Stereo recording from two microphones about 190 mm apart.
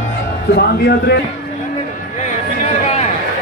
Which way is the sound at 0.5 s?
60° left (ahead or behind).